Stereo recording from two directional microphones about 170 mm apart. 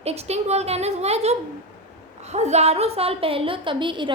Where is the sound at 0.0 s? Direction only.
40° right (ahead or behind).